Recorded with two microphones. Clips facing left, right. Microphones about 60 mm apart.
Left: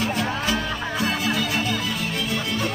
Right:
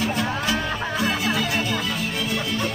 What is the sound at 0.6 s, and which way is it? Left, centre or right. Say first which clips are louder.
Music: right 1 dB; right.